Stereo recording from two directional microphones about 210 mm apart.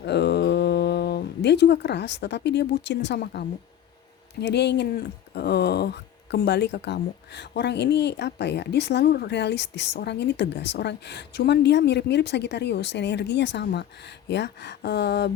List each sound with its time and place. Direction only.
0.0 s speech: 50° left (ahead or behind)